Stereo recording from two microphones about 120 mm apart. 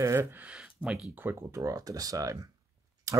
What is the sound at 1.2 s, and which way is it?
Speech, 20° right (ahead or behind).